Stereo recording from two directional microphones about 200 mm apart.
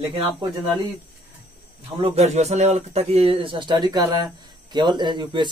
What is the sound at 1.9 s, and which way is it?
A man's voice, 30° right (ahead or behind).